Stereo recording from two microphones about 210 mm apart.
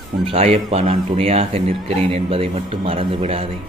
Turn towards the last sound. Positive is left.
turn(degrees=-30)  # may be behind; listen again after turning